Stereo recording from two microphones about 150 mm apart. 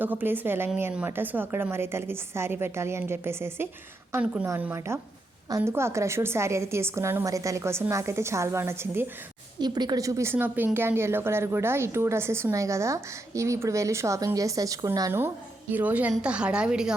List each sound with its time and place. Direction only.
0.0 s a woman's voice: 10° right (ahead or behind)
9.6 s a woman's voice: 30° right (ahead or behind); by 16.9 s 5° right (ahead or behind)